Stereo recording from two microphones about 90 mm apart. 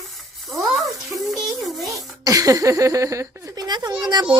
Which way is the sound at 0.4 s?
Centre (ahead or behind).